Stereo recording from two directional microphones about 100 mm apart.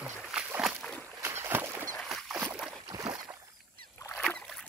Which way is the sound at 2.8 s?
40° right (ahead or behind).